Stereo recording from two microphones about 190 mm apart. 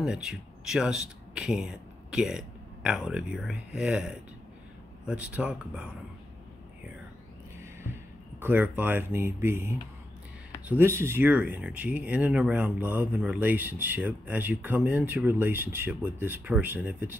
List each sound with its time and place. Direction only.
0.0 s speech: 5° right (ahead or behind)
8.4 s speech: 10° right (ahead or behind)